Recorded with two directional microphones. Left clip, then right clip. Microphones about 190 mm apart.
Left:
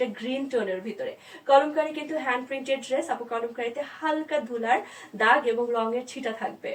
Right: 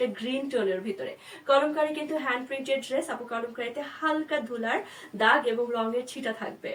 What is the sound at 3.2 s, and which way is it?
Speech, 25° right (ahead or behind).